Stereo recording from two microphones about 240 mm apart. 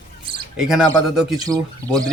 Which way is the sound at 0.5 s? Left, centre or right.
Centre.